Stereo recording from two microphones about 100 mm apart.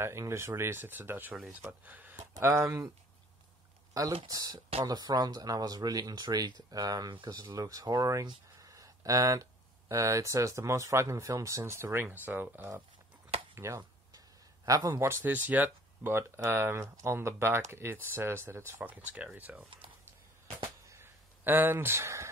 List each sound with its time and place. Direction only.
0.0 s speech: 25° right (ahead or behind)
2.4 s speech: 30° right (ahead or behind)
4.3 s speech: 35° right (ahead or behind)
7.4 s speech: 35° right (ahead or behind)
13.6 s a sound: 30° right (ahead or behind)
14.9 s speech: 25° right (ahead or behind)
15.2 s speech: 15° right (ahead or behind)
20.9 s a sound: 20° right (ahead or behind)